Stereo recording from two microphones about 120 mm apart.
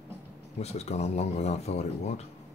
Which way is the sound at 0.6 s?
60° left (ahead or behind).